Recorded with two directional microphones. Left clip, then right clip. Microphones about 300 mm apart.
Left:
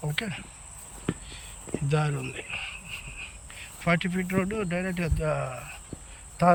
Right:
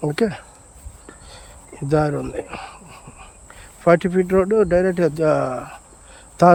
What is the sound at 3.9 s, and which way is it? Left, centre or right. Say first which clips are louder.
Speech: right 12 dB; right.